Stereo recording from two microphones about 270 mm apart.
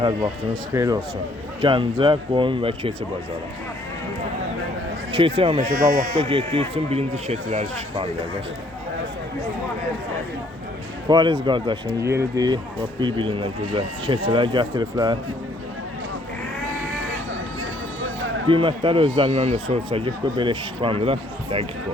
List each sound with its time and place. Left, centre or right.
0.7 s speech: centre
5.1 s speech: centre
11.1 s speech: centre
18.4 s speech: centre